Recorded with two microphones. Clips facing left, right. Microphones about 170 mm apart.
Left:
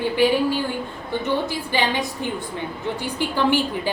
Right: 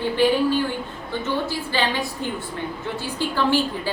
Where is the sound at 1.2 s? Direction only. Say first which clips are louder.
Left 1 dB; 15° left (ahead or behind).